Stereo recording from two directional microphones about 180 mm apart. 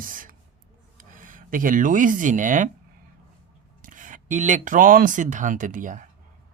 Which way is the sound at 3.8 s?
45° right (ahead or behind).